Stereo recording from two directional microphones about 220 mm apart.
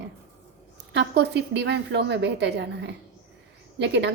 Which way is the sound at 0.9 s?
50° right (ahead or behind).